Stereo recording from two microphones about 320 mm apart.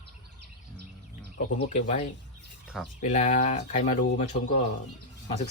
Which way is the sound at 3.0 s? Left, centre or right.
Left.